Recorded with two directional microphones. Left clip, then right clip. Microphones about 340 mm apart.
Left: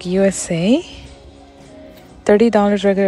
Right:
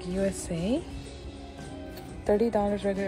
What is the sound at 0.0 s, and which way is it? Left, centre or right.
Speech, centre.